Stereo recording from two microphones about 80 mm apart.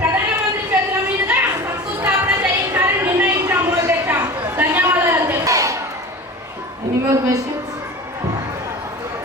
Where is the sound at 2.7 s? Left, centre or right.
Right.